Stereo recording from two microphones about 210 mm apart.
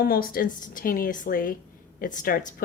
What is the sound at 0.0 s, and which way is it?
A woman's voice, 45° left (ahead or behind).